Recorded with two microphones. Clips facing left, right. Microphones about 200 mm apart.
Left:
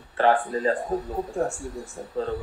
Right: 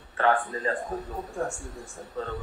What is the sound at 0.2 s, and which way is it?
Speech, 30° left (ahead or behind).